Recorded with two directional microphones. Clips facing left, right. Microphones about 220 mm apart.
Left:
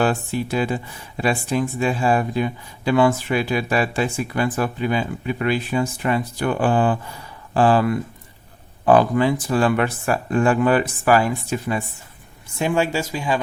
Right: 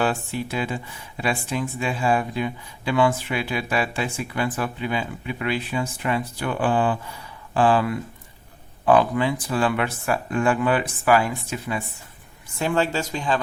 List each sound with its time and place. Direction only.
0.0 s speech: 40° left (ahead or behind)
12.5 s speech: 15° left (ahead or behind)